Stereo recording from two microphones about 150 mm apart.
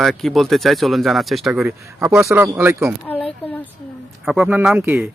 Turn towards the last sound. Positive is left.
turn(degrees=-10)  # may be behind; listen again after turning